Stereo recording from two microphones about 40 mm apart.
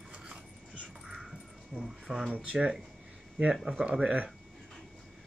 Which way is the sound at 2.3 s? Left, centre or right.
Right.